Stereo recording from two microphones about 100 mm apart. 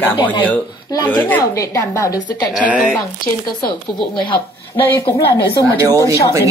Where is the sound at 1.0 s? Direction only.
15° left (ahead or behind).